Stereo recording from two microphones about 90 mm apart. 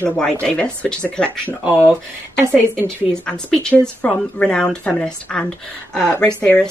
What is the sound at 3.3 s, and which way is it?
A woman's voice, 10° left (ahead or behind).